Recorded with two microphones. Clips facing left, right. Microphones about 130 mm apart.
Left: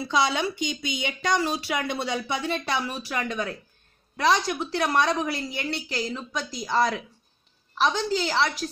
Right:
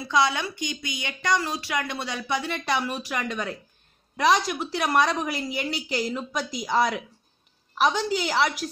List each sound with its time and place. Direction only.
0.3 s speech: 20° left (ahead or behind)
2.7 s a woman's voice: 15° right (ahead or behind)